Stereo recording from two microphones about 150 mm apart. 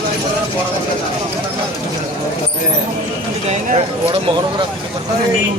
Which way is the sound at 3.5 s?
50° right (ahead or behind).